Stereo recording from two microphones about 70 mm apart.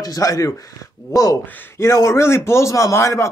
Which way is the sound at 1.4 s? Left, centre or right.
Left.